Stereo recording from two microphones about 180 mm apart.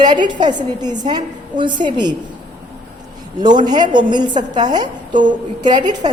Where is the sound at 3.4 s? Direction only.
25° right (ahead or behind).